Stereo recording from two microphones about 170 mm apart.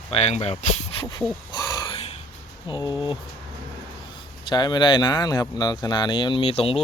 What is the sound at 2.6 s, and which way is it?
Speech, 25° left (ahead or behind).